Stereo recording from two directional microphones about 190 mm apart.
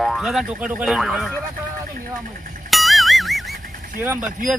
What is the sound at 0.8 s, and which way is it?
Speech, centre (ahead or behind).